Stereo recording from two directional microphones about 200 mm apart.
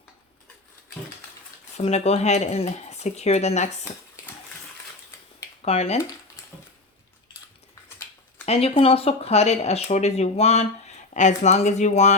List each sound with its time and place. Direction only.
1.7 s speech: 30° left (ahead or behind)
5.6 s speech: 30° left (ahead or behind)
8.4 s speech: 30° left (ahead or behind)